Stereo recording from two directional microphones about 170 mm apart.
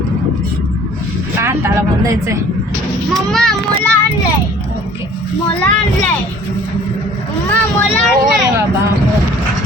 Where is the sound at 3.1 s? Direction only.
5° left (ahead or behind).